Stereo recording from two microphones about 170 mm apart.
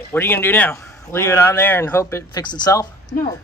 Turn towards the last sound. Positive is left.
turn(degrees=20)  # may be behind; listen again after turning